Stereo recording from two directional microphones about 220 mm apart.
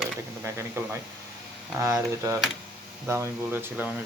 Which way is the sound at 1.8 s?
15° right (ahead or behind).